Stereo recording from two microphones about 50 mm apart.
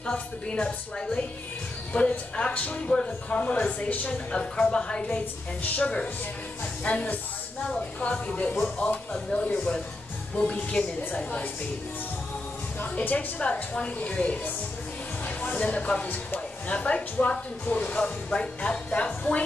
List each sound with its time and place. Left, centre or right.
0.0 s speech: left
1.9 s speech: left
2.9 s speech: centre
5.6 s speech: left
12.8 s speech: left
15.2 s music: left
15.6 s speech: left